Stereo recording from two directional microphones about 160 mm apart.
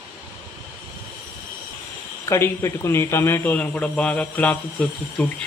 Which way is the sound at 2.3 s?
15° left (ahead or behind).